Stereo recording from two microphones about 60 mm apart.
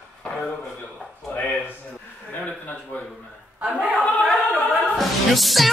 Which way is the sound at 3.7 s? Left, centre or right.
Right.